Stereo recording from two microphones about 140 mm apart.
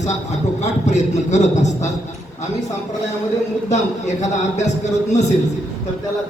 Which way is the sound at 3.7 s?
55° left (ahead or behind).